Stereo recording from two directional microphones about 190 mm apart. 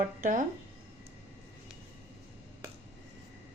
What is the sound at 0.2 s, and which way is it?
Speech, 45° right (ahead or behind).